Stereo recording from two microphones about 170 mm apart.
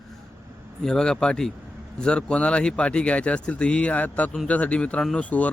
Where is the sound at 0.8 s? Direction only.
5° left (ahead or behind).